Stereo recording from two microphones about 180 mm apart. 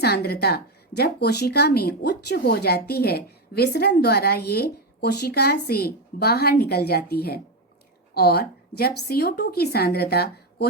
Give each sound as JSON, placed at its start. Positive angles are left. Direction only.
{"t": 0.0, "sound": "a woman's voice", "side_deg": 60}